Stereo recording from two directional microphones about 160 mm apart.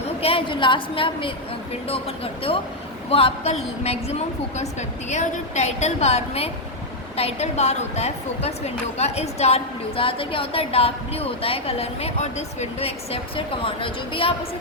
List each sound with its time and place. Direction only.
0.2 s a woman's voice: 35° left (ahead or behind)